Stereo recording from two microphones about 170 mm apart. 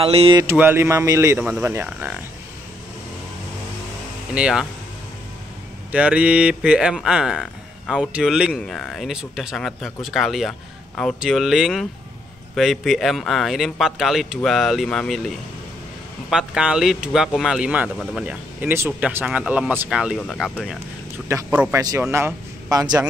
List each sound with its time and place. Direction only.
0.0 s speech: 35° right (ahead or behind)
0.4 s speech: 15° right (ahead or behind)
4.3 s speech: 5° right (ahead or behind)
5.9 s speech: 10° right (ahead or behind)
21.3 s a man's voice: 15° right (ahead or behind)